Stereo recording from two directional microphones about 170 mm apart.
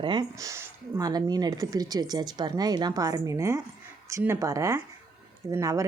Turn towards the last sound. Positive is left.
turn(degrees=-20)  # may be behind; listen again after turning